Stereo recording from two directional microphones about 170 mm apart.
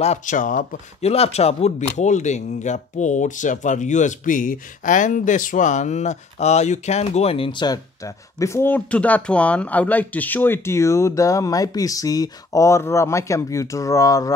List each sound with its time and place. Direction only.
0.0 s speech: 45° left (ahead or behind)
1.1 s speech: 35° left (ahead or behind); by 14.3 s 20° left (ahead or behind)